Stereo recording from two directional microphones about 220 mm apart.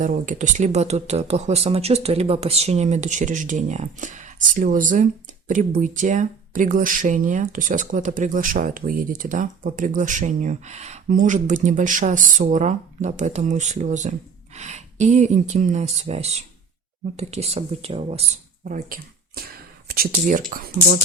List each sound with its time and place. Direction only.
0.0 s speech: 35° right (ahead or behind)